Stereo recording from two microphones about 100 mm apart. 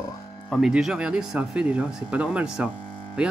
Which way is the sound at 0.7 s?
5° right (ahead or behind).